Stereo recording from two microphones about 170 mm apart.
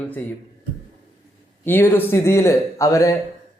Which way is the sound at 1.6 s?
10° left (ahead or behind).